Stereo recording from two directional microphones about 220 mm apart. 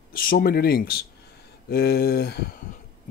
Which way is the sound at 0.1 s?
40° left (ahead or behind).